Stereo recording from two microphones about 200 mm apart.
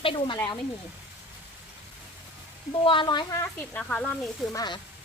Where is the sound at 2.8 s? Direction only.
25° left (ahead or behind); by 4.4 s 5° left (ahead or behind).